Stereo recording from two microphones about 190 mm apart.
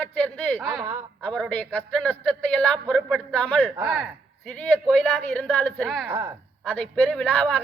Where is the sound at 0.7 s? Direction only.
20° right (ahead or behind).